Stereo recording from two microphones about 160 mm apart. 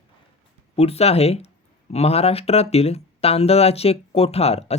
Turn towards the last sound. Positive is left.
turn(degrees=40)  # may be behind; listen again after turning